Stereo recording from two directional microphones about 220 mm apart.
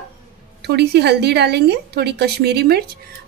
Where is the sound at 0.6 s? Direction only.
50° right (ahead or behind).